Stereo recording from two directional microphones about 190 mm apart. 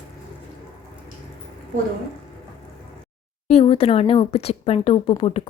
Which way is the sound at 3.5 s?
30° left (ahead or behind).